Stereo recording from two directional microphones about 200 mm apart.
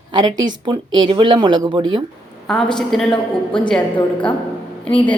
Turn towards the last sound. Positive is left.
turn(degrees=5)  # may be behind; listen again after turning